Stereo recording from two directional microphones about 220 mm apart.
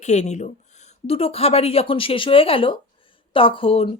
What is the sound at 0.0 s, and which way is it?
Speech, 30° left (ahead or behind).